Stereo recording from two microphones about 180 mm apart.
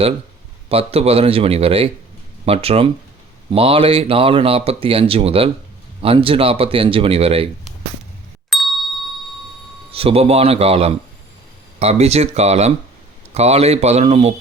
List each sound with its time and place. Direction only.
0.7 s speech: 35° right (ahead or behind)
8.4 s ding: centre (ahead or behind)
9.9 s speech: 35° right (ahead or behind)